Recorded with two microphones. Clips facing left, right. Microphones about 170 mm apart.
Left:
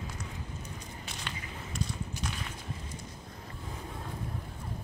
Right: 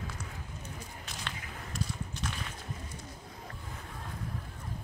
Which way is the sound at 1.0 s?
Centre (ahead or behind).